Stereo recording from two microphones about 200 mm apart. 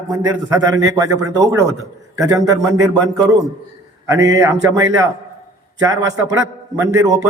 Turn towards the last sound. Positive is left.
turn(degrees=-15)  # may be behind; listen again after turning